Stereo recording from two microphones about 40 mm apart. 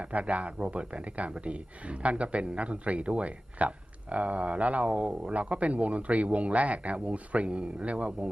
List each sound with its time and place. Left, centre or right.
0.0 s speech: right